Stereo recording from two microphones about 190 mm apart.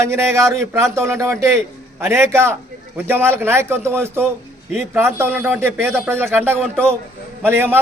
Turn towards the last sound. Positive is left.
turn(degrees=-10)  # may be behind; listen again after turning